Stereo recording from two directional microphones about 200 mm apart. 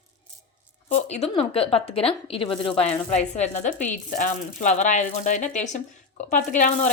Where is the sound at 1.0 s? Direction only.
35° left (ahead or behind).